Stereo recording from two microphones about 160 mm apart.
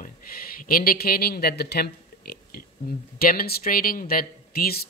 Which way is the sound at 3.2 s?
70° left (ahead or behind).